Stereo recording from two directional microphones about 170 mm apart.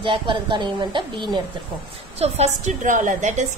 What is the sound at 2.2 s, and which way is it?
A woman's voice, 40° right (ahead or behind).